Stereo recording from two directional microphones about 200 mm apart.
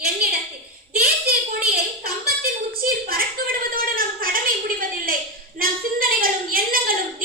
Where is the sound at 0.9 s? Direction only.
50° right (ahead or behind).